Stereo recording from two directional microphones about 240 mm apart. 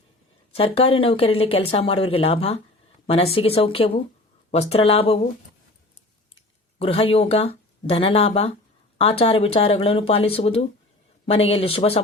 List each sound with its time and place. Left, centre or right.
0.5 s speech: left
6.3 s speech: left